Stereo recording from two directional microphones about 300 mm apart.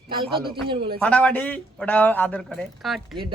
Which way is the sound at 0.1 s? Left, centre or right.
Centre.